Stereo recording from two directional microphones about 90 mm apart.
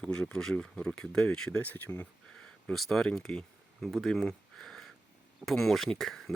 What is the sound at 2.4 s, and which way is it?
Speech, 5° left (ahead or behind).